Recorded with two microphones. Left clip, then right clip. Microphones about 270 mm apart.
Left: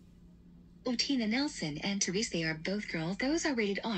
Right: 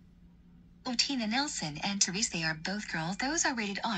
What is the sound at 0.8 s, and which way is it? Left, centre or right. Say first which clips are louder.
Speech: right 1 dB; right.